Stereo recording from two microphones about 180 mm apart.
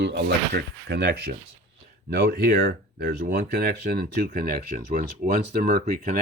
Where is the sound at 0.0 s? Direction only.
75° right (ahead or behind).